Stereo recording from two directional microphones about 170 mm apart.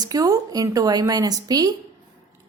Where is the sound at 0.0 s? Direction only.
20° right (ahead or behind).